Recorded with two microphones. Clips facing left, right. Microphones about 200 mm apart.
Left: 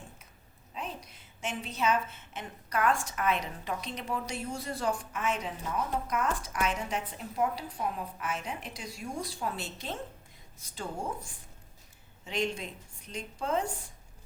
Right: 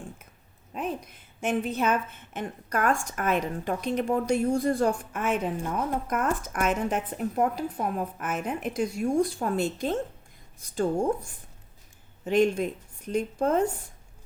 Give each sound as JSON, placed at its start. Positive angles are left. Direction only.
{"t": 0.7, "sound": "a woman's voice", "side_deg": -55}
{"t": 12.2, "sound": "a woman's voice", "side_deg": -50}